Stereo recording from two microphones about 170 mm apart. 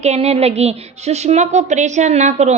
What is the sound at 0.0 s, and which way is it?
A woman's voice, 40° right (ahead or behind).